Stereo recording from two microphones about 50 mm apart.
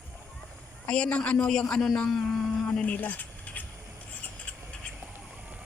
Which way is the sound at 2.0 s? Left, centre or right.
Centre.